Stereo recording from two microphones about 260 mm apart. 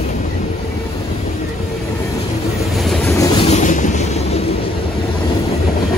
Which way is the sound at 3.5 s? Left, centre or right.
Left.